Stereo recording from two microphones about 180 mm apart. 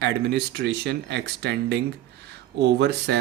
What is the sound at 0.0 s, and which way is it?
Speech, 65° right (ahead or behind).